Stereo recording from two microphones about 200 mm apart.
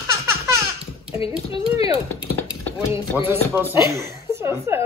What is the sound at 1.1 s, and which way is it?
Speech, 25° left (ahead or behind).